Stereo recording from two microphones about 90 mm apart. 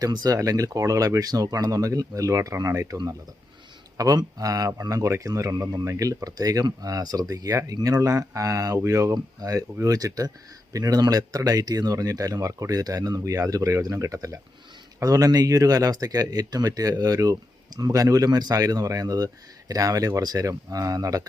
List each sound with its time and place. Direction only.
0.0 s speech: 45° right (ahead or behind)